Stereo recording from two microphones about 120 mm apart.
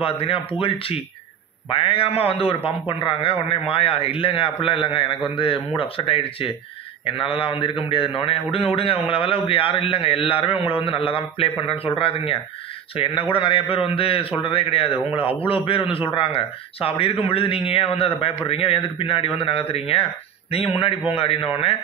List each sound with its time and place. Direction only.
0.0 s a man's voice: 50° left (ahead or behind)